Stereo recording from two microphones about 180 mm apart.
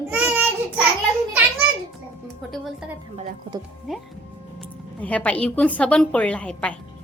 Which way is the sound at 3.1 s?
25° right (ahead or behind).